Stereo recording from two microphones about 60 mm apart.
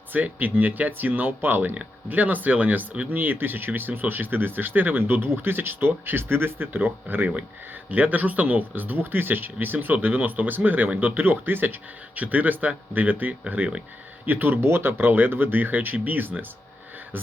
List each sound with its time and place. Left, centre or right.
0.1 s speech: right